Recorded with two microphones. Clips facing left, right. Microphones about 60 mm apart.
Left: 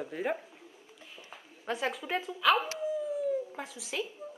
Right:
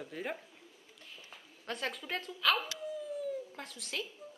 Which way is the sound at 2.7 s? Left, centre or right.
Centre.